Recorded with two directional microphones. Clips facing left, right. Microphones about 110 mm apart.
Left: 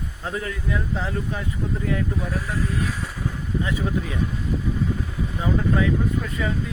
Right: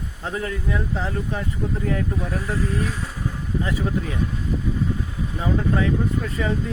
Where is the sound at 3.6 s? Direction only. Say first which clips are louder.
Right 1 dB; 35° right (ahead or behind).